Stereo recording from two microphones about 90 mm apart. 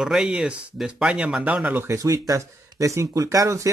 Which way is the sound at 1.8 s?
35° right (ahead or behind).